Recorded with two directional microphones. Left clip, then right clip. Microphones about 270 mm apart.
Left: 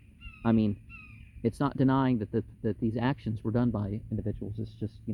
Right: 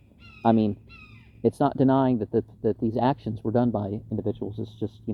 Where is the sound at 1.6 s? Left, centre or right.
Left.